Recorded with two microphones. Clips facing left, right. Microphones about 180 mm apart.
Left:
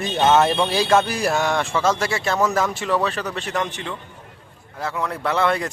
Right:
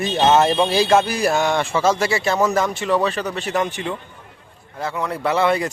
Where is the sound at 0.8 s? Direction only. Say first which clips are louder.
Right 1 dB; centre (ahead or behind).